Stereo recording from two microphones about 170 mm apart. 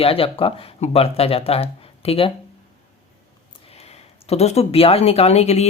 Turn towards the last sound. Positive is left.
turn(degrees=40)  # may be behind; listen again after turning